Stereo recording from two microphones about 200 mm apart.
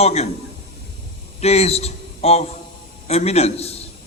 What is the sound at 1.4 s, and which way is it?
A man's voice, 30° left (ahead or behind).